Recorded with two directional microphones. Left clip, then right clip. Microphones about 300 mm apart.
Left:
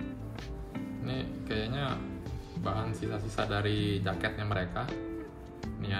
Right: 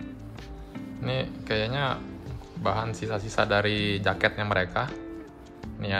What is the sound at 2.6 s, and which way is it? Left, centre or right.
Speech, right.